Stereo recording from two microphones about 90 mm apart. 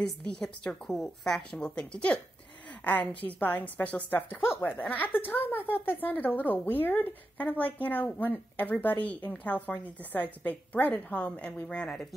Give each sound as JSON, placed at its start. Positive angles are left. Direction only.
{"t": 0.4, "sound": "a woman's voice", "side_deg": 5}